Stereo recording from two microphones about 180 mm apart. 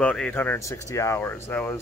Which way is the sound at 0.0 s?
5° left (ahead or behind).